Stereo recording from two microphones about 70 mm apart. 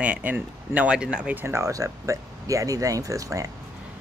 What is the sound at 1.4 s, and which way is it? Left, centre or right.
Speech, right.